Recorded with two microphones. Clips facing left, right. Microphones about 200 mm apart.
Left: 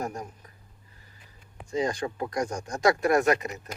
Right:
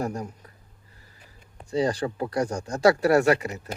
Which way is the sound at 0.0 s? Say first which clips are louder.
Right 4 dB; 35° right (ahead or behind).